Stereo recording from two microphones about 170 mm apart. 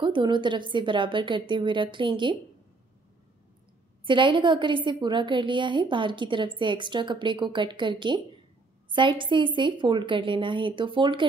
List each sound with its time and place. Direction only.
0.0 s a woman's voice: 30° right (ahead or behind)
4.0 s a woman's voice: 30° right (ahead or behind)